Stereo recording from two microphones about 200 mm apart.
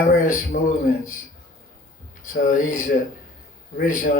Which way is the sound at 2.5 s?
40° left (ahead or behind).